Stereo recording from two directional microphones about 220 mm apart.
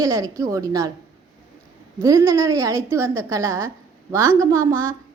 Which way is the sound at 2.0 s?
15° right (ahead or behind).